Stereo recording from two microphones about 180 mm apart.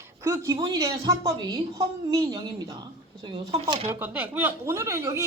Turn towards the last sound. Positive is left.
turn(degrees=-15)  # may be behind; listen again after turning